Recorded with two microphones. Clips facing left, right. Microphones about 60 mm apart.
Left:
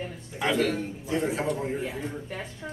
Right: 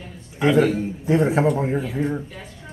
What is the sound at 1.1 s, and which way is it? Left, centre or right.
Speech, right.